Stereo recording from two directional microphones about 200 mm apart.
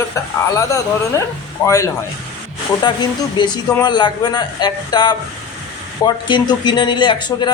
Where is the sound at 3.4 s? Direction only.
20° left (ahead or behind).